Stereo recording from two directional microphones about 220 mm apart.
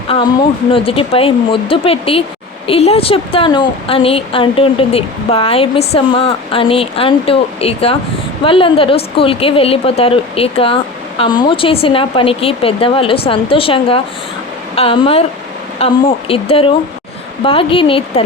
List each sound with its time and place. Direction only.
0.7 s a woman's voice: 25° left (ahead or behind)